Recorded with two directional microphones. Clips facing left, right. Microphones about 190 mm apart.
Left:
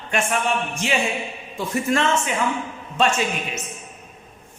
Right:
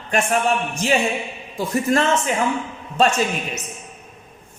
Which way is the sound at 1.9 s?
40° right (ahead or behind).